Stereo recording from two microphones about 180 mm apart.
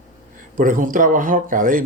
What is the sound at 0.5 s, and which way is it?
Speech, 50° right (ahead or behind).